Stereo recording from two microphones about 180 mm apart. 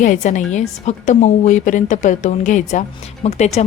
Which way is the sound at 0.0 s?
45° left (ahead or behind).